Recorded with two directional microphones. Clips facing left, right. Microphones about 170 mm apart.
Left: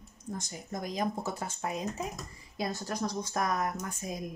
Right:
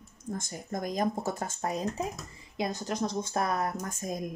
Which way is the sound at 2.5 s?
20° right (ahead or behind).